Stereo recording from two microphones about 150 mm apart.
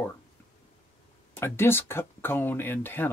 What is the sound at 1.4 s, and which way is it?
Speech, 15° left (ahead or behind).